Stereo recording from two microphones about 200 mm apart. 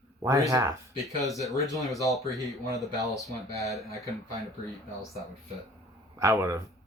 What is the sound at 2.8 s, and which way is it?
Speech, centre (ahead or behind).